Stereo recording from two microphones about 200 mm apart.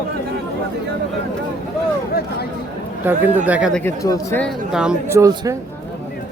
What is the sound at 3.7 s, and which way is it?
Speech, 15° left (ahead or behind).